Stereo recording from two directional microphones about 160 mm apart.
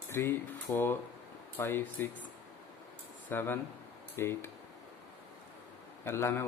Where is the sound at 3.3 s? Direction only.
15° left (ahead or behind).